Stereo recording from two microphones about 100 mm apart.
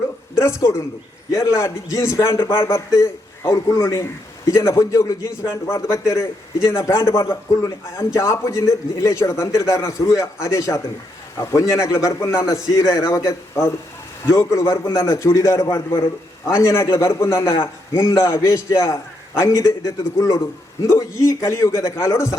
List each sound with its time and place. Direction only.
0.3 s a woman's voice: 30° left (ahead or behind)